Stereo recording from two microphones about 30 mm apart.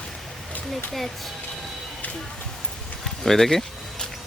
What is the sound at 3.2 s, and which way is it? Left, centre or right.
Speech, centre.